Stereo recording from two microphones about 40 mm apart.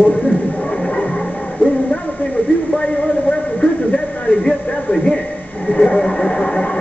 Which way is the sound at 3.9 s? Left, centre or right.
Left.